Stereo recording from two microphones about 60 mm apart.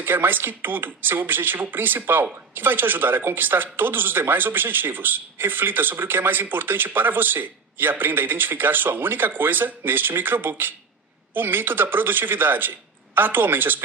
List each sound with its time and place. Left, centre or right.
0.0 s speech: right